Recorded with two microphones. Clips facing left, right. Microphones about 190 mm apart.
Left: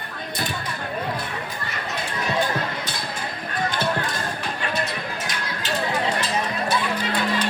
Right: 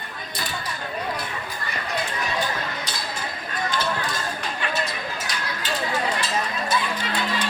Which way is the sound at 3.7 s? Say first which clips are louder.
Even; 55° left (ahead or behind).